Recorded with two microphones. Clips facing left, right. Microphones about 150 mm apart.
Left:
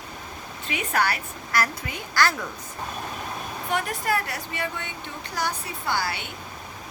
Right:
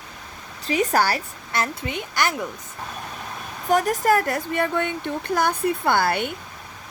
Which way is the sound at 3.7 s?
40° right (ahead or behind).